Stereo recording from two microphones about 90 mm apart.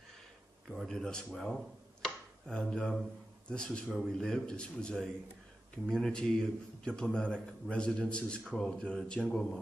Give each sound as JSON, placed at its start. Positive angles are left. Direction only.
{"t": 0.7, "sound": "a man's voice", "side_deg": 0}